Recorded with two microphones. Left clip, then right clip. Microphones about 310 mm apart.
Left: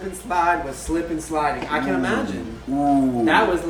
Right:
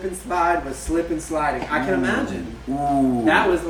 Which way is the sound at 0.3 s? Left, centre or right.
Centre.